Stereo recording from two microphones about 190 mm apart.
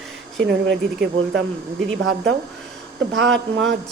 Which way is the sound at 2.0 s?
75° right (ahead or behind).